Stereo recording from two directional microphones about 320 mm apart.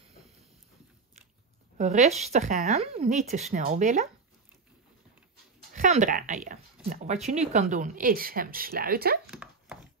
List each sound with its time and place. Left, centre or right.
1.8 s speech: right
5.7 s speech: right
9.3 s a sound: centre